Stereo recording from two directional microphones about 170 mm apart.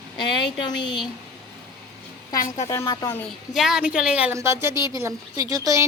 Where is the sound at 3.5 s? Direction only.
Centre (ahead or behind).